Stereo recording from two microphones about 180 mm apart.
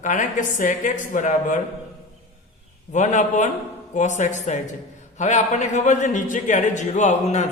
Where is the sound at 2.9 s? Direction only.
40° left (ahead or behind).